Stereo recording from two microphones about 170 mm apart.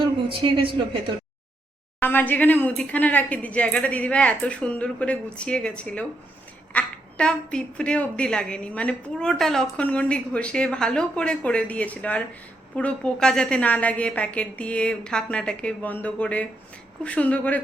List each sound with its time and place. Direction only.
0.3 s a man's voice: 30° right (ahead or behind)
2.0 s a woman's voice: 10° left (ahead or behind)